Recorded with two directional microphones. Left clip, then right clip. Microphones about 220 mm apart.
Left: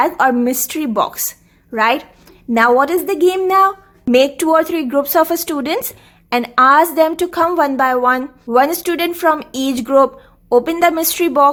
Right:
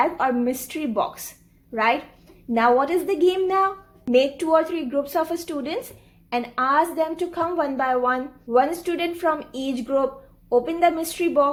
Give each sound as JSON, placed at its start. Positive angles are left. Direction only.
{"t": 0.0, "sound": "a woman's voice", "side_deg": 30}